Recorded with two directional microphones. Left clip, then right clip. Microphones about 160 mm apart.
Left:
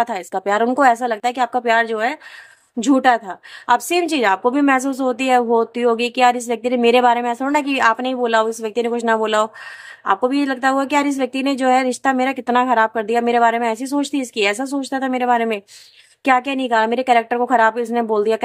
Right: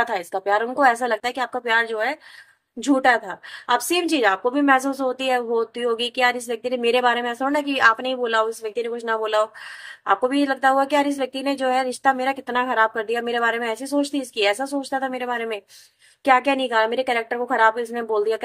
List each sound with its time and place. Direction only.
0.0 s speech: 50° left (ahead or behind)